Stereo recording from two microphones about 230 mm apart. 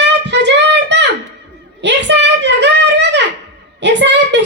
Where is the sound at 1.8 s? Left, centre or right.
Right.